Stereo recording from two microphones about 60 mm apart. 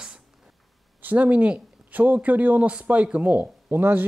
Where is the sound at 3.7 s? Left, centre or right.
Right.